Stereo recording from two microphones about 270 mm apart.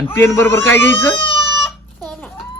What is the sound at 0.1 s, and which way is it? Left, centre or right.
Speech, centre.